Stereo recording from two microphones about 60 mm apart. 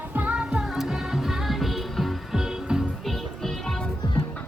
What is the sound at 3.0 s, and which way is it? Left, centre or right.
Music, centre.